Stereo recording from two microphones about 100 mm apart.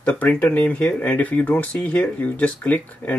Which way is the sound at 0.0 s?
15° left (ahead or behind).